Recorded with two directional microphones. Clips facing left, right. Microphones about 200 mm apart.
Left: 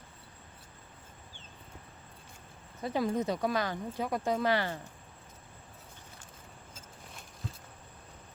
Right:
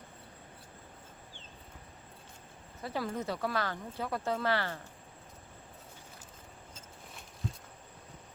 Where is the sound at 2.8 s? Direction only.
20° left (ahead or behind).